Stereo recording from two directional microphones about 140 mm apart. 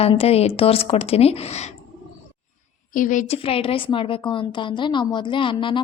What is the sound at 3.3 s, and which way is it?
A woman's voice, 40° left (ahead or behind).